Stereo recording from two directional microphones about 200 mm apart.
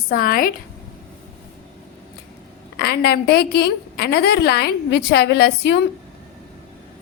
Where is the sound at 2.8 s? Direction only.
50° left (ahead or behind).